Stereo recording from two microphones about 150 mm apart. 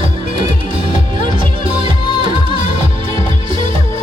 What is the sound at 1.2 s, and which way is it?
Music, 35° right (ahead or behind).